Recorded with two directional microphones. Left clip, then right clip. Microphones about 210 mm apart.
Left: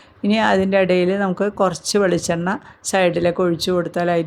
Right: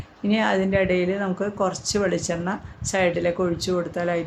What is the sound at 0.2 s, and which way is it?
Speech, 40° left (ahead or behind).